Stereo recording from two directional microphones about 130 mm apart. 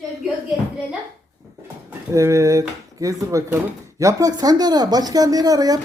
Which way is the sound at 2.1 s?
25° right (ahead or behind).